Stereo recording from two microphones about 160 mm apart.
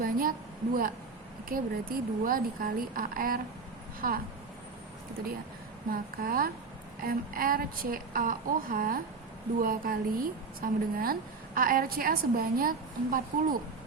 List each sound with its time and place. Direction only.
0.0 s a sound: 60° right (ahead or behind)
1.5 s a woman's voice: 65° right (ahead or behind)
5.9 s a woman's voice: 65° right (ahead or behind)